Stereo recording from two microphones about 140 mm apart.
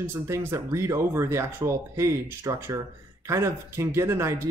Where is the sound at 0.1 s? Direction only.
20° right (ahead or behind).